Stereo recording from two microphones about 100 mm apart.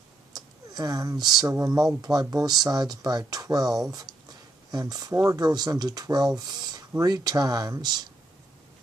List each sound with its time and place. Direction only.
0.3 s speech: 40° right (ahead or behind)